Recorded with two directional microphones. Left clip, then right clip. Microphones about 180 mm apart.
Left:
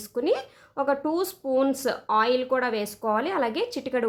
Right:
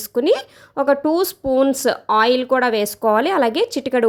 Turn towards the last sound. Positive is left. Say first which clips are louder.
# right 9 dB
turn(degrees=-40)  # may be behind; listen again after turning